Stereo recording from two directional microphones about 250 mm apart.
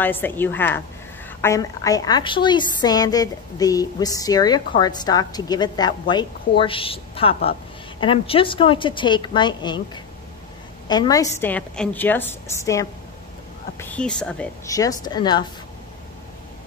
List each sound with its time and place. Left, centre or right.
0.0 s a woman's voice: centre
10.9 s a woman's voice: centre